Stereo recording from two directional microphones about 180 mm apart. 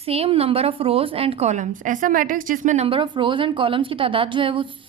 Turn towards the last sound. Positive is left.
turn(degrees=-30)  # may be behind; listen again after turning